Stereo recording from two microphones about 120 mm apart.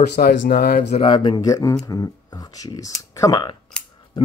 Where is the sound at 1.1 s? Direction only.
40° left (ahead or behind).